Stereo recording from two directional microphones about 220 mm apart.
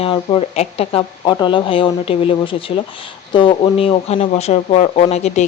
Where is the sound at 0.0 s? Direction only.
25° left (ahead or behind).